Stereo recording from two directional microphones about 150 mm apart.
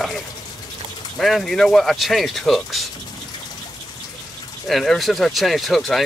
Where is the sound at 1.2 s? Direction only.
Centre (ahead or behind).